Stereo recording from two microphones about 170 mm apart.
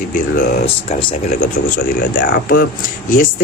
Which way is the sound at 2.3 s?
75° left (ahead or behind).